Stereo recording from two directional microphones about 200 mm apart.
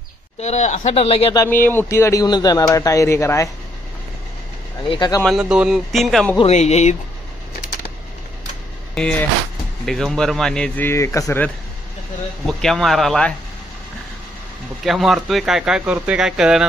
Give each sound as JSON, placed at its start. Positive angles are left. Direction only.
{"t": 0.4, "sound": "speech", "side_deg": 35}
{"t": 1.4, "sound": "speech", "side_deg": 10}
{"t": 4.8, "sound": "speech", "side_deg": 20}
{"t": 5.2, "sound": "speech", "side_deg": -5}
{"t": 6.3, "sound": "speech", "side_deg": 35}
{"t": 9.0, "sound": "speech", "side_deg": 0}
{"t": 12.6, "sound": "speech", "side_deg": 0}
{"t": 14.9, "sound": "speech", "side_deg": 0}